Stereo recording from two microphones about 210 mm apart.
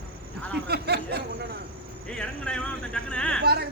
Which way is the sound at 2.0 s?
5° left (ahead or behind).